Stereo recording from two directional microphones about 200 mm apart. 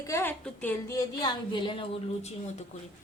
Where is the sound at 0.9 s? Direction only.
20° left (ahead or behind).